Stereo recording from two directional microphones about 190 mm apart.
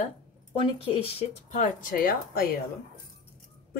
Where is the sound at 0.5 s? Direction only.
30° left (ahead or behind); by 2.4 s 50° left (ahead or behind).